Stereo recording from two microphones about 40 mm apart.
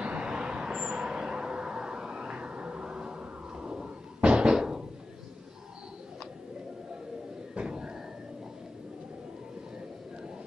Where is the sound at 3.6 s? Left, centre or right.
Right.